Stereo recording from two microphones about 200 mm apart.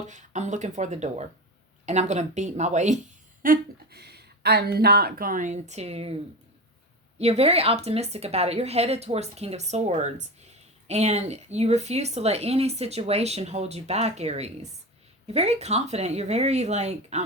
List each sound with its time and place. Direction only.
0.0 s a woman's voice: 35° right (ahead or behind)
3.4 s speech: 50° right (ahead or behind); by 6.1 s 30° right (ahead or behind)
7.2 s a woman's voice: 30° right (ahead or behind)